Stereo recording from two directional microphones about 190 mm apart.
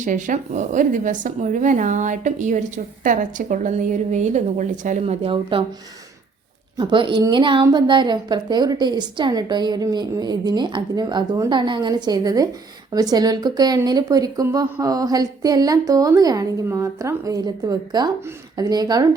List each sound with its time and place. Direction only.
0.0 s speech: 45° right (ahead or behind); by 5.6 s 25° right (ahead or behind)
6.7 s a woman's voice: 25° right (ahead or behind)